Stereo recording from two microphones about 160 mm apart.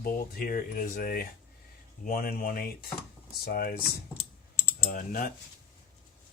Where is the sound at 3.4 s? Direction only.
80° left.